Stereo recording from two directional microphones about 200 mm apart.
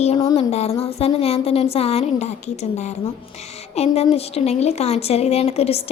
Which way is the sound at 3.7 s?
30° left (ahead or behind).